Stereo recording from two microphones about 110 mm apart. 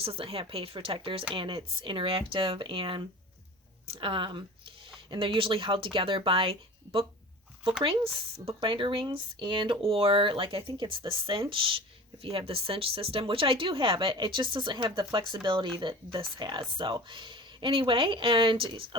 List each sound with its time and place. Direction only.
0.0 s speech: 60° right (ahead or behind)